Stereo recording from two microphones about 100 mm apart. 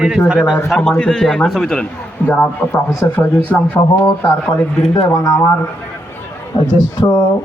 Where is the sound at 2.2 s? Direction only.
20° left (ahead or behind).